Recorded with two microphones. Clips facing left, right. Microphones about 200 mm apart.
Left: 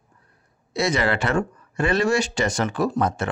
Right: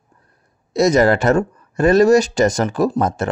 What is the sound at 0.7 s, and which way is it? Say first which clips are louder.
Speech: right 9 dB; 40° right (ahead or behind).